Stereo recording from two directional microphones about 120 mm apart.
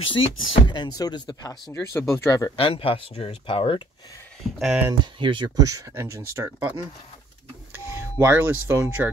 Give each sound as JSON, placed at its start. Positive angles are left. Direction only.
{"t": 0.0, "sound": "speech", "side_deg": 45}
{"t": 1.7, "sound": "speech", "side_deg": 20}
{"t": 2.5, "sound": "speech", "side_deg": 50}
{"t": 4.4, "sound": "speech", "side_deg": 0}
{"t": 5.2, "sound": "speech", "side_deg": -40}